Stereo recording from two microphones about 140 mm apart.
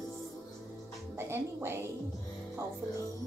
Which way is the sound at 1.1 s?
20° right (ahead or behind).